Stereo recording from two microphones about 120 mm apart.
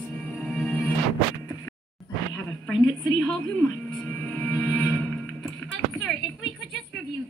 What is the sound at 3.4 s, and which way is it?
Music, 15° left (ahead or behind).